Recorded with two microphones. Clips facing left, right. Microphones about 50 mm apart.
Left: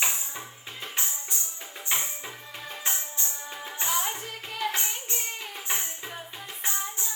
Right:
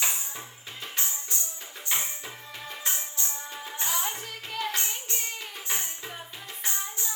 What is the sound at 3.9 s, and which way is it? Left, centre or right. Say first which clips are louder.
Music: left 3 dB; centre.